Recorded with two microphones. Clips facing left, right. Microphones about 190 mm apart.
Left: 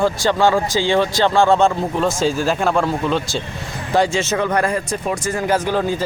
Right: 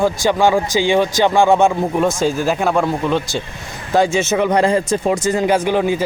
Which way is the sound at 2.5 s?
5° right (ahead or behind).